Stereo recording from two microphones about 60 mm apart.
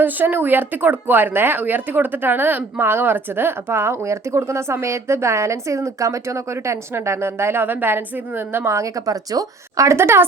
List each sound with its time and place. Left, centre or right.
0.0 s a woman's voice: right
8.7 s speech: right
9.9 s a woman's voice: right